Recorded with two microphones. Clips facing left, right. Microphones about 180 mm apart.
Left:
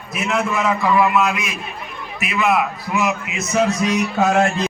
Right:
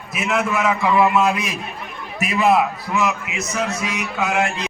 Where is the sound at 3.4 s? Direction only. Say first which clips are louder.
Left 6 dB; 30° left (ahead or behind).